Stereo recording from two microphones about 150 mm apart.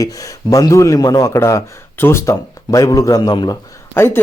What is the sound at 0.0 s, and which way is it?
Speech, 25° left (ahead or behind).